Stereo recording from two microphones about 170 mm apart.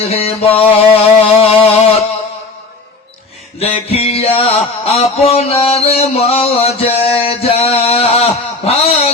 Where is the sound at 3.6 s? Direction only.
35° left (ahead or behind).